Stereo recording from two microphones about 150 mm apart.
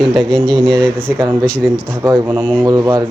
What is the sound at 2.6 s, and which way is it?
Speech, 25° right (ahead or behind).